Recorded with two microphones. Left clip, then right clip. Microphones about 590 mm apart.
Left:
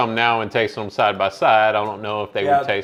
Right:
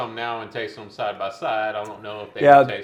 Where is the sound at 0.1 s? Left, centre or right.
Left.